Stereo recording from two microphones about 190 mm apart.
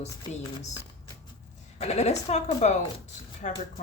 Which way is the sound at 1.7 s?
35° left (ahead or behind).